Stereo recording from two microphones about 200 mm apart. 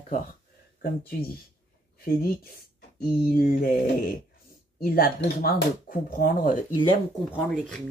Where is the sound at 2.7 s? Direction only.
50° left (ahead or behind).